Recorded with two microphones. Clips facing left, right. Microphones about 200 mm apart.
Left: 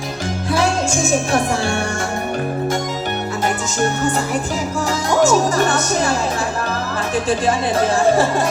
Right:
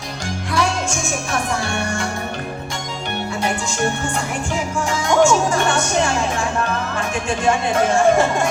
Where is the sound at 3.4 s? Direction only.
40° left (ahead or behind).